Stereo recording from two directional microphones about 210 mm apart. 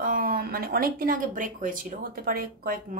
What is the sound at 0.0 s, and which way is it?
A woman's voice, 45° right (ahead or behind).